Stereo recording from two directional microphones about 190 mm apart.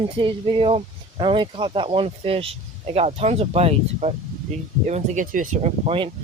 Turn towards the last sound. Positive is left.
turn(degrees=-35)  # may be behind; listen again after turning